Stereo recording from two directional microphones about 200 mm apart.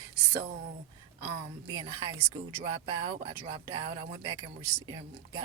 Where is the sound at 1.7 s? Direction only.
20° right (ahead or behind).